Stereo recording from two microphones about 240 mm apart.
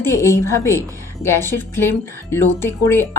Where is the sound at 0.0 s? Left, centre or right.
Centre.